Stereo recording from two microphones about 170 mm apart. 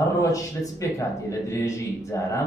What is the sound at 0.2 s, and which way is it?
Speech, 20° left (ahead or behind).